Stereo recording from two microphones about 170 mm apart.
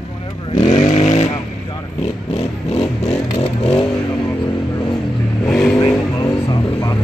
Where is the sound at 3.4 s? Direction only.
35° left (ahead or behind).